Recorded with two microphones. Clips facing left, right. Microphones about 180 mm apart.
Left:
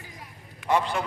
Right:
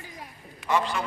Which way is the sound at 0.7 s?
50° left (ahead or behind).